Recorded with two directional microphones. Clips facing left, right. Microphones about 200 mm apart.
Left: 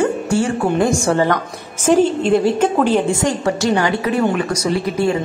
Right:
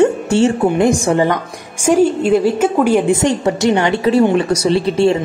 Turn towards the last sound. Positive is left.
turn(degrees=-25)  # may be behind; listen again after turning